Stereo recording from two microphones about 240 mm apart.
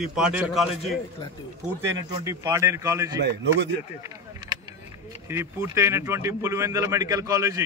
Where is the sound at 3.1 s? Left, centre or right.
Right.